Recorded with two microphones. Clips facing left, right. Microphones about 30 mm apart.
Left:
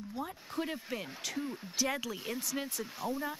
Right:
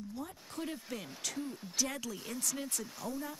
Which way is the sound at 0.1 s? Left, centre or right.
Left.